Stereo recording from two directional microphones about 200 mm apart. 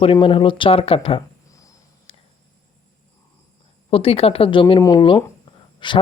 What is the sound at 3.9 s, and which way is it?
Speech, 30° left (ahead or behind).